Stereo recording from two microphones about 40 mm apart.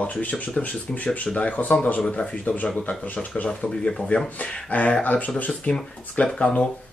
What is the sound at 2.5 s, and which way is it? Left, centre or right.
Speech, left.